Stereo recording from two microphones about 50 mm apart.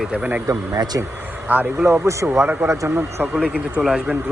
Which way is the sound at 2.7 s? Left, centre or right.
Right.